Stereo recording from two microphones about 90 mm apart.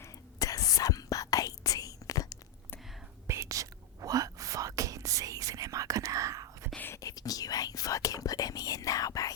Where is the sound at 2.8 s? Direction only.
Centre (ahead or behind).